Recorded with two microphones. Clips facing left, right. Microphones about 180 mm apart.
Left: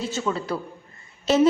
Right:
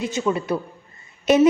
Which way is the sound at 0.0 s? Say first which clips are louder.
Right 4 dB; 15° right (ahead or behind).